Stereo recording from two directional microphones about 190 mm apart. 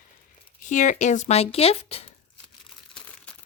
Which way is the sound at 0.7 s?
40° left (ahead or behind).